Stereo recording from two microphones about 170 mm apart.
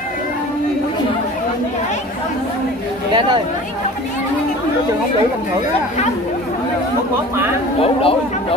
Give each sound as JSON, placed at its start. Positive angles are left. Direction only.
{"t": 7.8, "sound": "speech", "side_deg": 35}